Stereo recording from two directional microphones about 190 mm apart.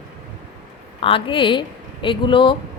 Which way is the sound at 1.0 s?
30° left (ahead or behind).